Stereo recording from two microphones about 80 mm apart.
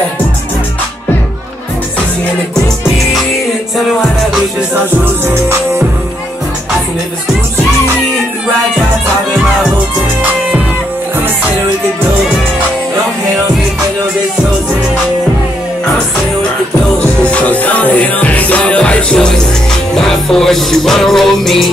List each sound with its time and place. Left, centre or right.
5.2 s music: right
17.2 s music: centre